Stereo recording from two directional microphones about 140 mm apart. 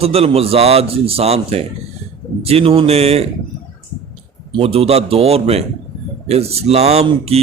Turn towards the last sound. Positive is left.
turn(degrees=-45)  # may be behind; listen again after turning